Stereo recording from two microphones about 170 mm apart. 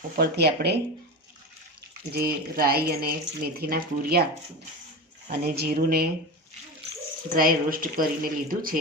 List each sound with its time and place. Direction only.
0.2 s speech: 75° right (ahead or behind)
2.1 s speech: 65° right (ahead or behind)
5.5 s speech: 65° right (ahead or behind)
7.3 s speech: 60° right (ahead or behind)